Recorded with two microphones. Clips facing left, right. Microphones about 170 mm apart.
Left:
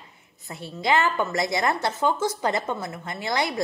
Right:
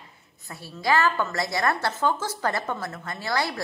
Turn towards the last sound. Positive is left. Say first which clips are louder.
# left 1 dB
turn(degrees=20)  # may be behind; listen again after turning